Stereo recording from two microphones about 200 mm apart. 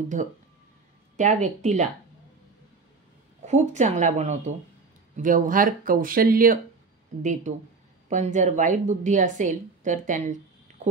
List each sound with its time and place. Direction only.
1.1 s a woman's voice: 40° right (ahead or behind)
3.4 s a woman's voice: 35° right (ahead or behind)
8.1 s a woman's voice: 35° right (ahead or behind)
10.7 s a sound: 35° right (ahead or behind)